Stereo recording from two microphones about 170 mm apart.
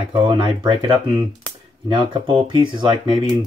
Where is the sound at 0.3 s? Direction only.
30° right (ahead or behind).